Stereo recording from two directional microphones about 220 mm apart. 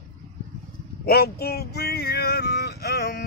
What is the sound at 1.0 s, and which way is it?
Male singing, 45° left (ahead or behind).